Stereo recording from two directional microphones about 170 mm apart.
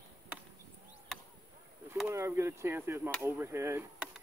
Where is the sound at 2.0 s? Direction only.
15° right (ahead or behind).